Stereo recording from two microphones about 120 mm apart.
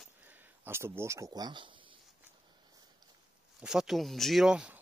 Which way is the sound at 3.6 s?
5° right (ahead or behind).